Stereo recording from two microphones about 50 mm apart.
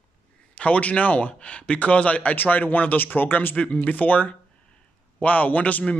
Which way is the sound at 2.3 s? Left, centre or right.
Left.